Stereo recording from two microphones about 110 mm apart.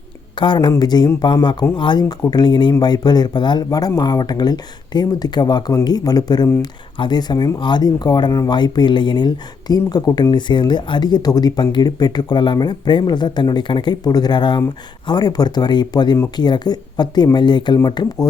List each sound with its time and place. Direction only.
0.3 s speech: 45° left (ahead or behind)